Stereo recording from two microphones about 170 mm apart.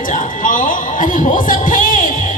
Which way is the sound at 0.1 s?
50° left (ahead or behind).